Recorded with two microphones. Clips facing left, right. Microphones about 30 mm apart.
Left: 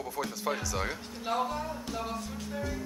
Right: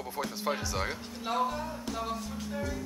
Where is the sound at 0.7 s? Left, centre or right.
Centre.